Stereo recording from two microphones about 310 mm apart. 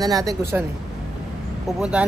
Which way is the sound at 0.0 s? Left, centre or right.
Centre.